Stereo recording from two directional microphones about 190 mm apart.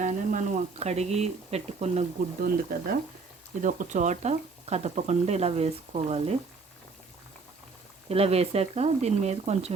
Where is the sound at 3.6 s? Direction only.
40° right (ahead or behind).